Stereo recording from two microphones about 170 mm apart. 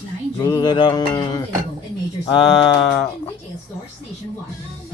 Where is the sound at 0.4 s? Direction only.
25° left (ahead or behind).